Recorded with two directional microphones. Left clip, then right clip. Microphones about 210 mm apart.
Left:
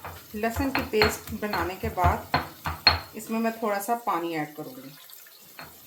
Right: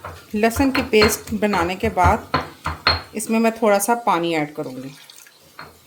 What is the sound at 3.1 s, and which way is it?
Speech, 55° right (ahead or behind).